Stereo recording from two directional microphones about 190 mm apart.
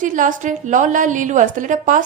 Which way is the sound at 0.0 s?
45° right (ahead or behind).